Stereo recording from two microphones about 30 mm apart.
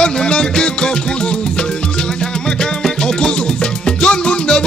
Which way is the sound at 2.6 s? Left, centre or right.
Left.